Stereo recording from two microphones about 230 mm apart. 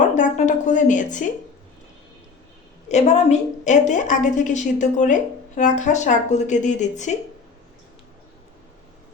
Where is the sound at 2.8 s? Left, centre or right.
Left.